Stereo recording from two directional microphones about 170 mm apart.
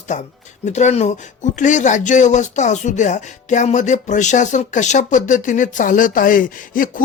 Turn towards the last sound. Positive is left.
turn(degrees=55)  # may be behind; listen again after turning